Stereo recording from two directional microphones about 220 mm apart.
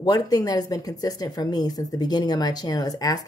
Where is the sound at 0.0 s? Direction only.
15° left (ahead or behind).